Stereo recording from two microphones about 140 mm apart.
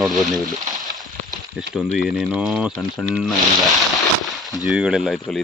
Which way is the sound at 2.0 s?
5° right (ahead or behind).